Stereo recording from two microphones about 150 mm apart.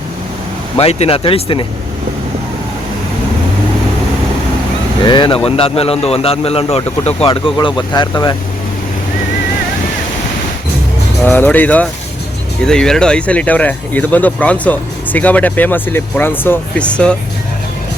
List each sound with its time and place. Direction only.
0.8 s a man's voice: 40° left (ahead or behind)
5.0 s a man's voice: 30° left (ahead or behind)
11.3 s speech: 10° left (ahead or behind)